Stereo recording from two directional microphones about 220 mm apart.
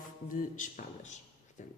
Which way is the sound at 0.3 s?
35° left (ahead or behind).